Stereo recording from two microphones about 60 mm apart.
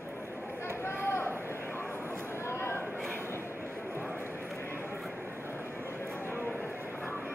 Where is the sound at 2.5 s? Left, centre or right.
Left.